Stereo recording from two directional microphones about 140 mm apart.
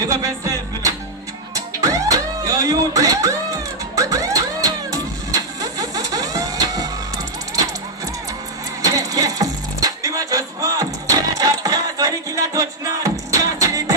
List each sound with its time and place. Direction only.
0.0 s music: 25° right (ahead or behind)
8.8 s music: 25° right (ahead or behind)